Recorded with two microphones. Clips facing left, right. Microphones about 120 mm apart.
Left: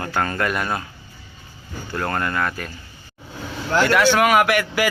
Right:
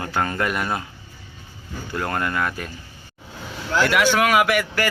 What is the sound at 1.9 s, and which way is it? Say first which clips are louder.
Speech: left 1 dB; 10° right (ahead or behind).